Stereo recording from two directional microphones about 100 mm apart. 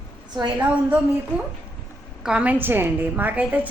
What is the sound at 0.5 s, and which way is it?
A woman's voice, 15° right (ahead or behind).